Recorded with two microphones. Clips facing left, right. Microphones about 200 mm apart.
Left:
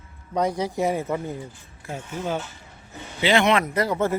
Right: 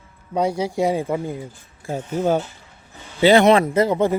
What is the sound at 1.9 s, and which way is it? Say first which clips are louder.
Speech: right 8 dB; 40° right (ahead or behind).